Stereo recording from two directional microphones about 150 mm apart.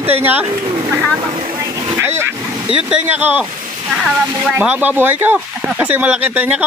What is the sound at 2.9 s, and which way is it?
Speech, 10° right (ahead or behind).